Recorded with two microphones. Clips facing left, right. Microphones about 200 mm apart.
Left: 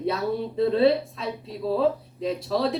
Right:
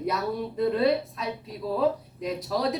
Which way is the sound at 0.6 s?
30° left (ahead or behind).